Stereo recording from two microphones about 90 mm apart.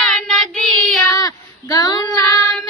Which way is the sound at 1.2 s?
45° left (ahead or behind).